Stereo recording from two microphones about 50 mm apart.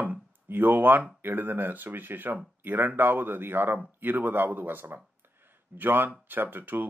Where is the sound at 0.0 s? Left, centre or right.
Right.